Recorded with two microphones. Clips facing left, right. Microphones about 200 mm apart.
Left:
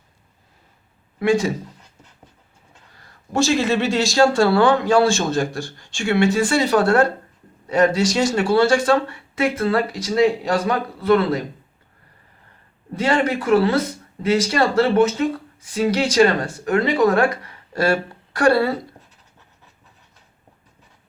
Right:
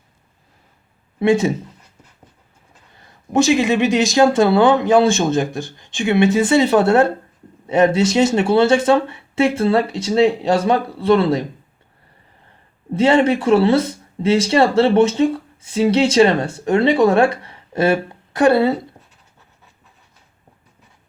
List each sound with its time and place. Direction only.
1.2 s speech: 25° right (ahead or behind)
2.9 s speech: 20° right (ahead or behind)
12.9 s speech: 25° right (ahead or behind)